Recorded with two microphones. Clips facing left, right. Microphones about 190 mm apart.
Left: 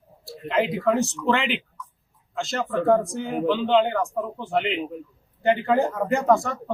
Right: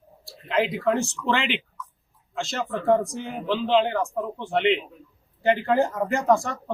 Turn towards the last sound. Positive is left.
turn(degrees=0)  # may be behind; listen again after turning